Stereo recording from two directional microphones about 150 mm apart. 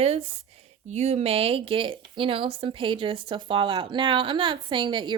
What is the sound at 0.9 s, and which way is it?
Speech, 45° right (ahead or behind).